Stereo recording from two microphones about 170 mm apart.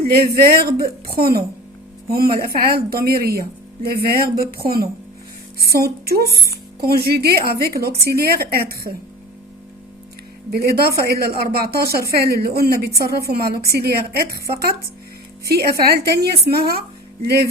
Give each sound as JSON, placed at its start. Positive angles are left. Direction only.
{"t": 0.0, "sound": "a woman's voice", "side_deg": -65}
{"t": 10.5, "sound": "a woman's voice", "side_deg": -65}